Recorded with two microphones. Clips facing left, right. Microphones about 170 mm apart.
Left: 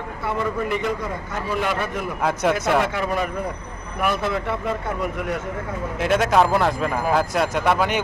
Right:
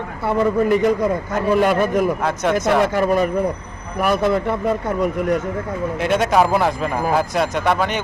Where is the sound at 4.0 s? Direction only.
40° right (ahead or behind).